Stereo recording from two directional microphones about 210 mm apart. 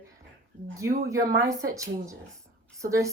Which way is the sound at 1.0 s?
15° right (ahead or behind).